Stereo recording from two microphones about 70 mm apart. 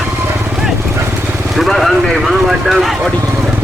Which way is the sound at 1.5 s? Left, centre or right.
Centre.